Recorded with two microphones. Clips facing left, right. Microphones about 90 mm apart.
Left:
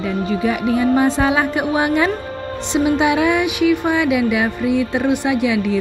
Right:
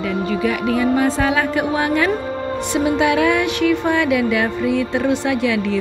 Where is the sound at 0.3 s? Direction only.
25° left (ahead or behind).